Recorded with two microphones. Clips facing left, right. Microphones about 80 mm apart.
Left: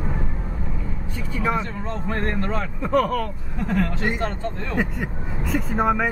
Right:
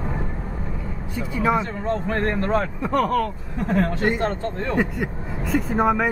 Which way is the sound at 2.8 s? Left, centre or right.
Centre.